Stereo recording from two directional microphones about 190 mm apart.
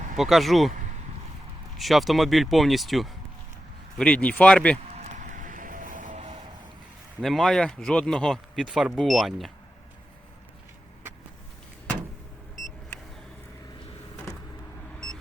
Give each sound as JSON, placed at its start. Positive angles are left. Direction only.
{"t": 0.2, "sound": "speech", "side_deg": 0}
{"t": 1.8, "sound": "speech", "side_deg": 0}
{"t": 4.9, "sound": "vehicle", "side_deg": -40}
{"t": 7.2, "sound": "speech", "side_deg": 0}